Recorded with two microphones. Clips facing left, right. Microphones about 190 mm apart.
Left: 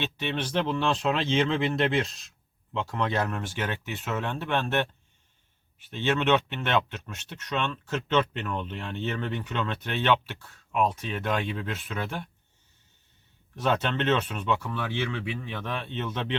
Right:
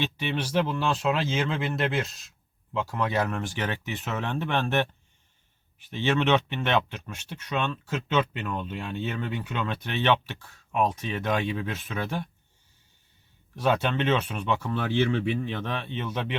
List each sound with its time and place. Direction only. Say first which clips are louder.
0.2 s speech: right 1 dB; 10° right (ahead or behind)
5.9 s speech: right 1 dB; 15° right (ahead or behind)
13.6 s speech: right 2 dB; 10° right (ahead or behind)
14.7 s speech: right 6 dB; 30° right (ahead or behind)
15.6 s speech: right 1 dB; 15° right (ahead or behind)